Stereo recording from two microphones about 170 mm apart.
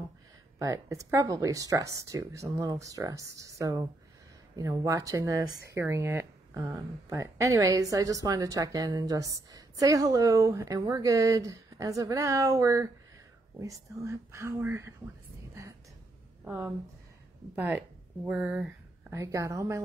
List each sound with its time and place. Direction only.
0.6 s speech: 20° right (ahead or behind)
16.4 s speech: 10° right (ahead or behind)
19.1 s speech: 20° right (ahead or behind)